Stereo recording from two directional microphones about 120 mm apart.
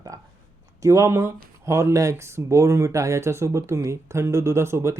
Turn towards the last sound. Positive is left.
turn(degrees=-25)  # may be behind; listen again after turning